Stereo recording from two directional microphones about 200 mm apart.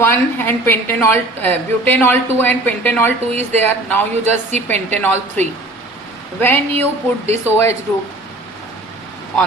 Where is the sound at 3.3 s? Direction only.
35° right (ahead or behind).